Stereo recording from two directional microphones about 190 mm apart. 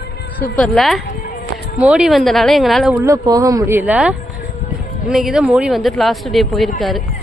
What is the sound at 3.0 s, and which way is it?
Speech, 15° right (ahead or behind).